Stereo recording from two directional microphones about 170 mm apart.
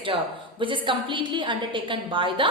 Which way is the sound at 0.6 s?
30° right (ahead or behind).